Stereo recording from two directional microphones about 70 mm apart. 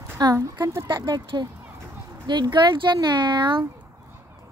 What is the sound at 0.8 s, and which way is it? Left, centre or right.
Speech, right.